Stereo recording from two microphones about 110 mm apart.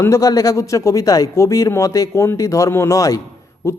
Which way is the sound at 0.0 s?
30° left (ahead or behind).